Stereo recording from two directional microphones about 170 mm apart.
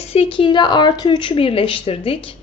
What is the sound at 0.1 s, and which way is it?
Speech, 35° left (ahead or behind).